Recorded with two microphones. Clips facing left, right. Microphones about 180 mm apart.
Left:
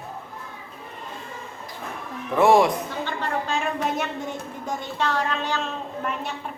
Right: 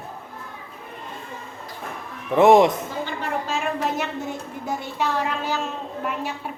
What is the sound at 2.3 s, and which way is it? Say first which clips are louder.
Speech: right 3 dB; 20° right (ahead or behind).